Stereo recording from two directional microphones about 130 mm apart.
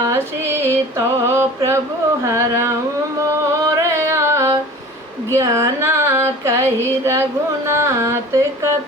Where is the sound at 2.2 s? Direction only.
25° right (ahead or behind).